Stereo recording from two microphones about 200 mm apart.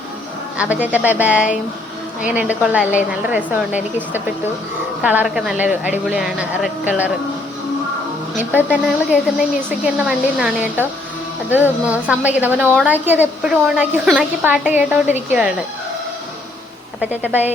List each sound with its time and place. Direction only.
0.5 s a woman's voice: 5° right (ahead or behind)
5.0 s a woman's voice: 5° right (ahead or behind)
8.5 s a woman's voice: 5° right (ahead or behind)
17.0 s a woman's voice: 10° right (ahead or behind)